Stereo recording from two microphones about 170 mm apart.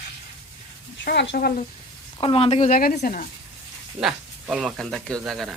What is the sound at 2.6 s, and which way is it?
Speech, 55° left (ahead or behind).